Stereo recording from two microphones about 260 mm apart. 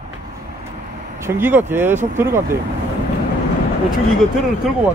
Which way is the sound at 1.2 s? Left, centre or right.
Centre.